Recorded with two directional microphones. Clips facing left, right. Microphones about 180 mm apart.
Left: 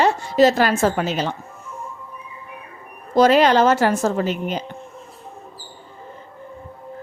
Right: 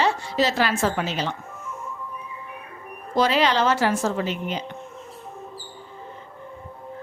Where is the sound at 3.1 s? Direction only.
45° left (ahead or behind).